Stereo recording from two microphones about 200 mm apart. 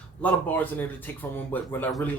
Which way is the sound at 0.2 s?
10° left (ahead or behind).